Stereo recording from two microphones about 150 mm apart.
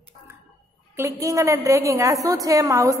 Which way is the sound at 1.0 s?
20° right (ahead or behind).